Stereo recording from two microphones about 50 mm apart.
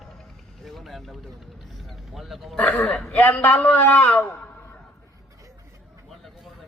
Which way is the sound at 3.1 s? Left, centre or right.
Left.